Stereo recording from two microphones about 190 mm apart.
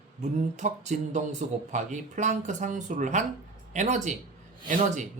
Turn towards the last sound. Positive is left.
turn(degrees=-40)  # may be behind; listen again after turning